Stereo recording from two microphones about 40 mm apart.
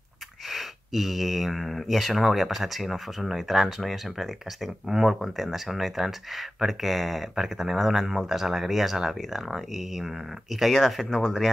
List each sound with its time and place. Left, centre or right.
0.5 s speech: centre
11.1 s speech: centre